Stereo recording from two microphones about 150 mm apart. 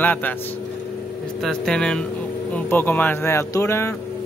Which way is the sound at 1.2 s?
5° left (ahead or behind).